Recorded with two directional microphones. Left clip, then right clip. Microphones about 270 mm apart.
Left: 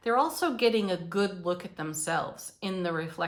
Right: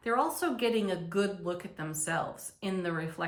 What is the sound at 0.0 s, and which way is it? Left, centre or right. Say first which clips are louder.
A woman's voice: left 3 dB; centre.